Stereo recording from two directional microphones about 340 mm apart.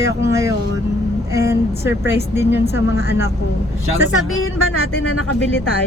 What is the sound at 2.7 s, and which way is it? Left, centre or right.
A woman's voice, left.